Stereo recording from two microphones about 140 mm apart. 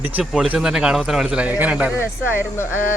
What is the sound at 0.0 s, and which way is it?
A man's voice, 10° right (ahead or behind).